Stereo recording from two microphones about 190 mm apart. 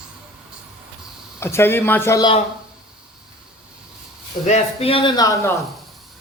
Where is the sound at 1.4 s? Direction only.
15° left (ahead or behind).